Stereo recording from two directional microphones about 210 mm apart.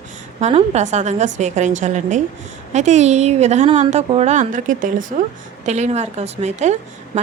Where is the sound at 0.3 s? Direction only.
30° right (ahead or behind).